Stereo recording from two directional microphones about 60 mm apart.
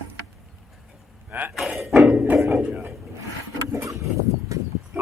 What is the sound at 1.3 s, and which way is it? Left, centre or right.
Speech, right.